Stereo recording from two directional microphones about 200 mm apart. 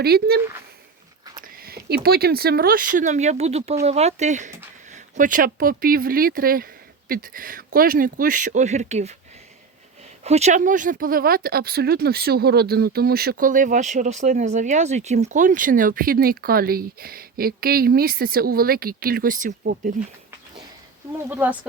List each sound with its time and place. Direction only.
0.0 s speech: 50° right (ahead or behind); by 9.1 s 35° right (ahead or behind)
10.2 s speech: 35° right (ahead or behind)
21.2 s speech: 10° right (ahead or behind)